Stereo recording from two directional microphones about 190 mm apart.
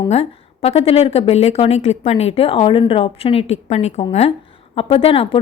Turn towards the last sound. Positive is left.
turn(degrees=30)  # may be behind; listen again after turning